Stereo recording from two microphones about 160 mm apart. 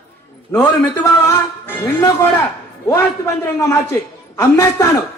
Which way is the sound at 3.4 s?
15° left (ahead or behind).